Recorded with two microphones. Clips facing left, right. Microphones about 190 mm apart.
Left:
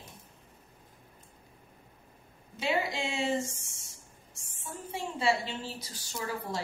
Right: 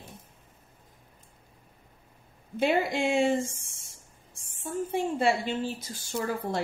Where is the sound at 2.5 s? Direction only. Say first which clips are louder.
Right 6 dB; 55° right (ahead or behind).